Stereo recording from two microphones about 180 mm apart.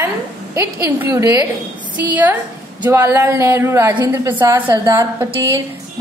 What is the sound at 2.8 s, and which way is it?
A woman's voice, 10° right (ahead or behind).